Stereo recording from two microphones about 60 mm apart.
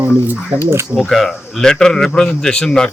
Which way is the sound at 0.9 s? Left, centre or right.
Centre.